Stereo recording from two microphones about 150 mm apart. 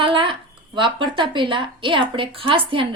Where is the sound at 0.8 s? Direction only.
35° right (ahead or behind).